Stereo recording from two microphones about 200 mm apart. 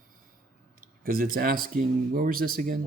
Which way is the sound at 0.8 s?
45° right (ahead or behind).